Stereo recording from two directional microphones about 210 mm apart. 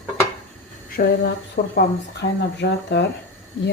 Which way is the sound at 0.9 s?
50° left (ahead or behind).